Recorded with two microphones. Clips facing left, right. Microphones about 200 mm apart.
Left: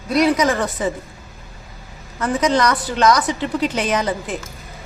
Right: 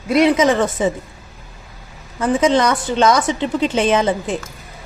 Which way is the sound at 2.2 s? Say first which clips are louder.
Right 3 dB; 25° right (ahead or behind).